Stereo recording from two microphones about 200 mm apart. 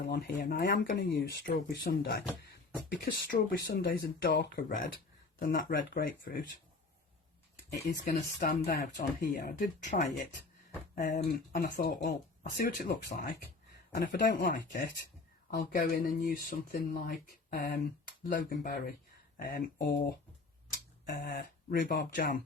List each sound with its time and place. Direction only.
0.0 s speech: 50° left (ahead or behind)
7.7 s speech: 50° left (ahead or behind)
13.9 s speech: 50° left (ahead or behind)